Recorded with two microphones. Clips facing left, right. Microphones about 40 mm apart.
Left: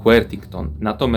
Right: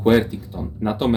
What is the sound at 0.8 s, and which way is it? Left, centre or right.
Speech, left.